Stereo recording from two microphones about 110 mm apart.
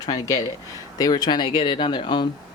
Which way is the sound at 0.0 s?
35° left (ahead or behind).